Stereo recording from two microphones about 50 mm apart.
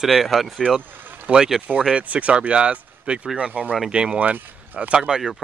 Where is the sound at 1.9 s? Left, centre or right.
Right.